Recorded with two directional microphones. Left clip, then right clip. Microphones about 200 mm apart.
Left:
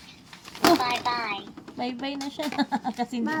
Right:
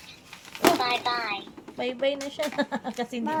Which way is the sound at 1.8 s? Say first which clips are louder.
Right 5 dB; 20° right (ahead or behind).